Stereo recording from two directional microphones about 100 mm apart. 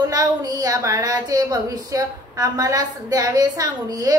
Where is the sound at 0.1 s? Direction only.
40° right (ahead or behind).